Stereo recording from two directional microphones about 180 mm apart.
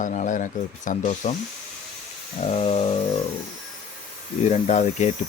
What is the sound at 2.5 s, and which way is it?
Speech, 35° left (ahead or behind).